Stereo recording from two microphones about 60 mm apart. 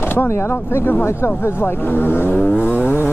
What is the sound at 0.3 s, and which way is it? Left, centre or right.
Speech, left.